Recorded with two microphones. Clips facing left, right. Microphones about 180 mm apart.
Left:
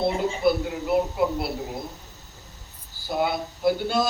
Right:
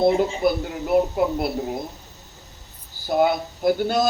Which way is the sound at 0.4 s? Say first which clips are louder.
Left 1 dB; 45° right (ahead or behind).